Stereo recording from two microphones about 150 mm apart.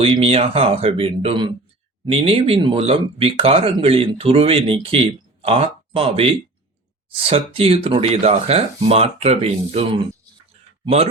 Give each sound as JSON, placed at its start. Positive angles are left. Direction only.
{"t": 0.0, "sound": "speech", "side_deg": -40}